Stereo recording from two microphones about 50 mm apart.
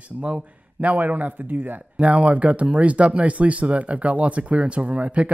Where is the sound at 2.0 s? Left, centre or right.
Right.